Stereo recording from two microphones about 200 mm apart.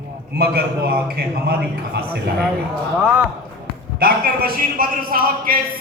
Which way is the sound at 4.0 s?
45° right (ahead or behind).